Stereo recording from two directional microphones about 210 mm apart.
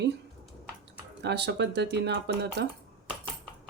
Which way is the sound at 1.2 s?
55° right (ahead or behind).